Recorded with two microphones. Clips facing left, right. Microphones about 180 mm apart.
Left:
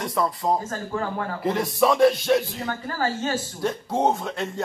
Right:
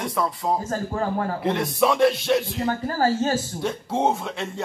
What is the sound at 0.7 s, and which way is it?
Speech, 35° right (ahead or behind).